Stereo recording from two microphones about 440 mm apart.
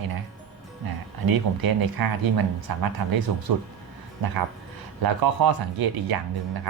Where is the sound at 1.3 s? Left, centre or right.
Right.